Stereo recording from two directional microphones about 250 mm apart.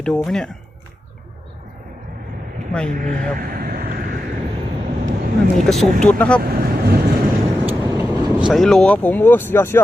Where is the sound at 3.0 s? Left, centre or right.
Right.